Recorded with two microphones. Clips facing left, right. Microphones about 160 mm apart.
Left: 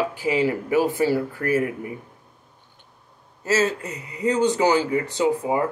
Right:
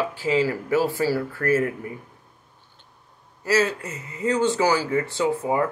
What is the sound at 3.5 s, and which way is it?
Speech, 20° left (ahead or behind).